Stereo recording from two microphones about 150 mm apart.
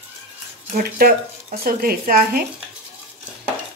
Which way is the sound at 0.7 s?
75° right (ahead or behind).